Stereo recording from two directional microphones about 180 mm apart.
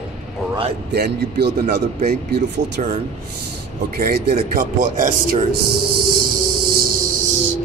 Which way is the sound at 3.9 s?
60° right (ahead or behind).